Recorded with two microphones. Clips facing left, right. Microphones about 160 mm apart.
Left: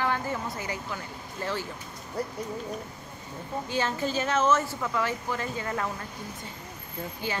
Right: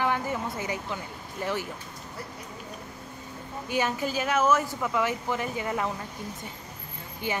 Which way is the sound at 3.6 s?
15° right (ahead or behind).